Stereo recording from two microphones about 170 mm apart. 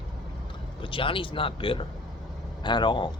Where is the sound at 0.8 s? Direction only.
30° left (ahead or behind).